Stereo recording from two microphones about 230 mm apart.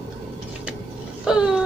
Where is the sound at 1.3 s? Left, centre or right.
Centre.